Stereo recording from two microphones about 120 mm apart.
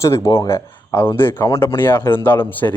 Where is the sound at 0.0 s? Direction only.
25° left (ahead or behind).